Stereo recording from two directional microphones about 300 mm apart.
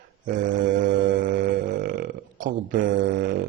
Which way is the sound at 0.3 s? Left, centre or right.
Right.